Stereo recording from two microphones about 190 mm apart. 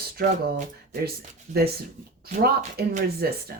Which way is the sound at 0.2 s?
55° right (ahead or behind).